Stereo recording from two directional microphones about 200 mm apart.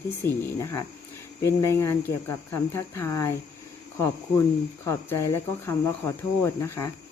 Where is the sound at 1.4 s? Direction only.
15° left (ahead or behind).